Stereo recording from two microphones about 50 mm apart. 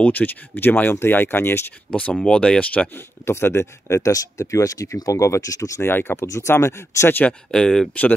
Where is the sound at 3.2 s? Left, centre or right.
Left.